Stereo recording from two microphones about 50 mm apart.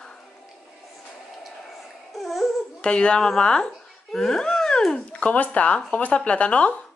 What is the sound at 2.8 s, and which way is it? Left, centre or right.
Speech, centre.